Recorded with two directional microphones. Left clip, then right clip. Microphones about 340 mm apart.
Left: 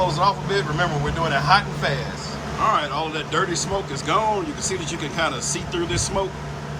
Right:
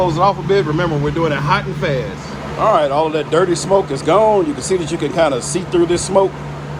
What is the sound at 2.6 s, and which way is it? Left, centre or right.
Speech, centre.